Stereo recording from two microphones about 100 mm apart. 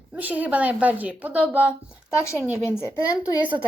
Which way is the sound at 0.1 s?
15° right (ahead or behind).